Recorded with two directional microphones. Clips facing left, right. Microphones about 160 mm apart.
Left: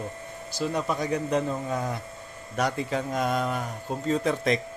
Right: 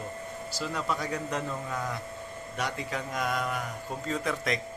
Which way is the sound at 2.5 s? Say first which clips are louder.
Left 7 dB; 35° left (ahead or behind).